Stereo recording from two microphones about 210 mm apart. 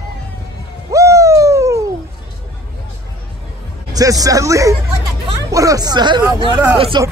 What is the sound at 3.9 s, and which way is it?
A man's voice, 15° right (ahead or behind).